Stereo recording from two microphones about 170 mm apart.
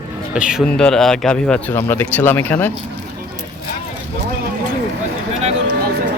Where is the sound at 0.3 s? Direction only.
5° right (ahead or behind); by 2.7 s 10° left (ahead or behind).